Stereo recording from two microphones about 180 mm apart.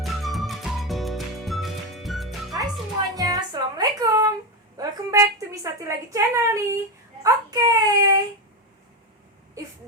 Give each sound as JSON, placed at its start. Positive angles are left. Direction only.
{"t": 0.0, "sound": "music", "side_deg": 0}
{"t": 3.2, "sound": "music", "side_deg": -20}
{"t": 4.8, "sound": "a woman's voice", "side_deg": -15}